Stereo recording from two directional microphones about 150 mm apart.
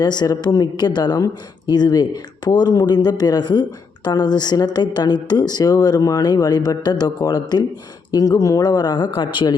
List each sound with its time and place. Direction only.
0.0 s a woman's voice: 25° left (ahead or behind)